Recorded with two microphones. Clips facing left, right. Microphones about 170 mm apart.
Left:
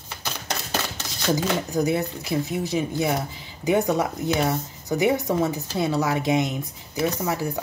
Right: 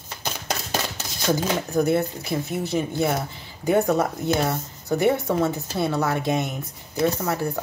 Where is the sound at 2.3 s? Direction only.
15° left (ahead or behind).